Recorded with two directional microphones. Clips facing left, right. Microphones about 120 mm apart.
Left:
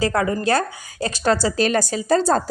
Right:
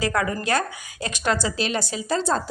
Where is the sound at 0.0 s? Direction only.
30° left (ahead or behind).